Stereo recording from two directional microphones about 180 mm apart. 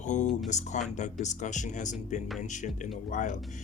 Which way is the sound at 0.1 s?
40° left (ahead or behind).